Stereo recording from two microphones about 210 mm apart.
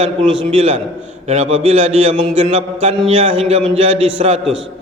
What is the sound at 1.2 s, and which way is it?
Mantra, 30° right (ahead or behind).